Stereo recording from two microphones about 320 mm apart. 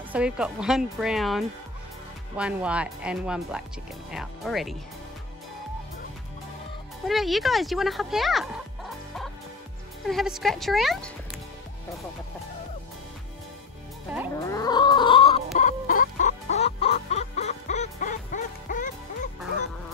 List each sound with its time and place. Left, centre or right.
0.1 s speech: centre
7.1 s speech: centre
10.0 s speech: centre
14.3 s chicken: centre